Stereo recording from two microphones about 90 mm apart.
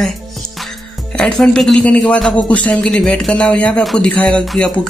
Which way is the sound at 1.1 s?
10° left (ahead or behind).